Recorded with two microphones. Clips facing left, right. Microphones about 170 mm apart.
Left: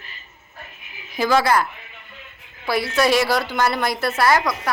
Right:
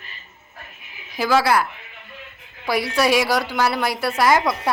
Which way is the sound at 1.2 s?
5° right (ahead or behind).